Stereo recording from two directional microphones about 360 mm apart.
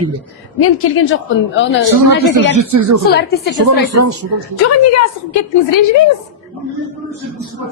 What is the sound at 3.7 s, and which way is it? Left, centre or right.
Speech, right.